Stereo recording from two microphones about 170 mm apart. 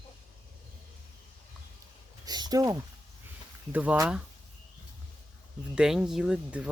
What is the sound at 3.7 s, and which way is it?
Speech, 10° right (ahead or behind).